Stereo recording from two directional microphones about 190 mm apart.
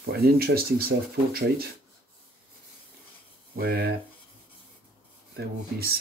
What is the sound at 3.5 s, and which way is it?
Speech, 55° right (ahead or behind).